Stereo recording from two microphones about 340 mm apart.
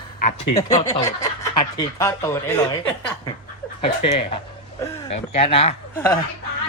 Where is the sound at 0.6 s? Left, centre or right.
Centre.